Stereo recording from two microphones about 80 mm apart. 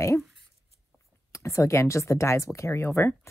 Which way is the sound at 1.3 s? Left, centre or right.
Left.